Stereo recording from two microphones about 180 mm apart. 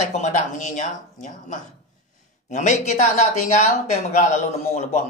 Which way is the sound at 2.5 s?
40° left (ahead or behind).